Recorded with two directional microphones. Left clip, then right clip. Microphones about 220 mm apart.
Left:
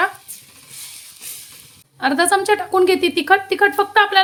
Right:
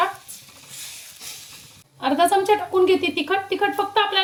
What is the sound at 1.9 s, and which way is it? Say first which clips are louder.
A woman's voice: left 2 dB; 45° left (ahead or behind).